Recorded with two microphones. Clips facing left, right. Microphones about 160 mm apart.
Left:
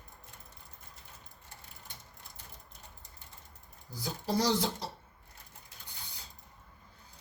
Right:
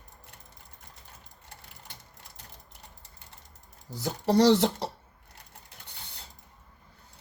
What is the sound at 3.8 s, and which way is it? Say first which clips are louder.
Speech: right 8 dB; 70° right (ahead or behind).